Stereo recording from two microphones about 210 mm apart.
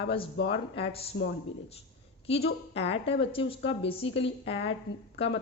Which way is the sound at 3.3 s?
25° left (ahead or behind).